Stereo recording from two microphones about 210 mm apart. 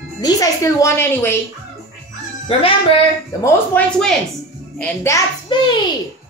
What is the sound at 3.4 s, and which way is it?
A child's voice, 5° left (ahead or behind).